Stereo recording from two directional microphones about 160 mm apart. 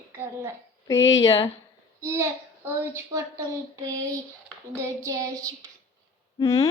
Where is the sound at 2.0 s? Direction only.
20° right (ahead or behind).